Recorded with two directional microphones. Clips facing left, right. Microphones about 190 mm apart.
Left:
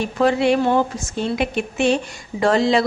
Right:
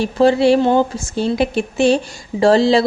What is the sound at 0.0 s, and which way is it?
A woman's voice, 30° right (ahead or behind).